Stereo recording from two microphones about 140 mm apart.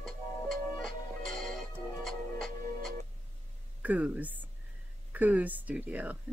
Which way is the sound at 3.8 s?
10° right (ahead or behind).